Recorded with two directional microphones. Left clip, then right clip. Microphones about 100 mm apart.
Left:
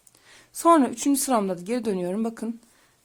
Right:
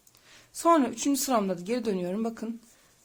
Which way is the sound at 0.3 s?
40° left (ahead or behind).